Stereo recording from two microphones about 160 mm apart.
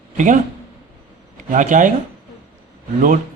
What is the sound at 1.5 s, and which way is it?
Speech, 55° right (ahead or behind).